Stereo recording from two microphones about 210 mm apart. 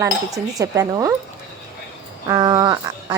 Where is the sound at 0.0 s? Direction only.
15° right (ahead or behind).